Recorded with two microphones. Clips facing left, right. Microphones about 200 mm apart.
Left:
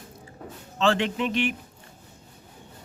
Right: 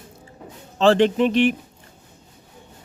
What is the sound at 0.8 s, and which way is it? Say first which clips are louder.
Speech: right 8 dB; 35° right (ahead or behind).